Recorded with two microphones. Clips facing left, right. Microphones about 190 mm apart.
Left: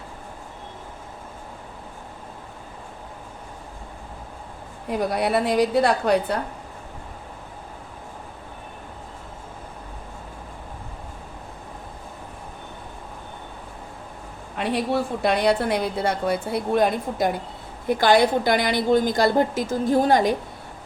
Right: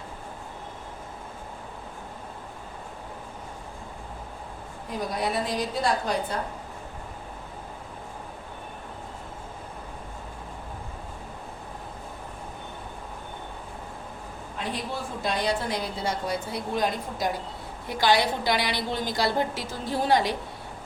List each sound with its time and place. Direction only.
4.9 s a woman's voice: 65° left (ahead or behind)
14.6 s a woman's voice: 65° left (ahead or behind); by 20.3 s 45° left (ahead or behind)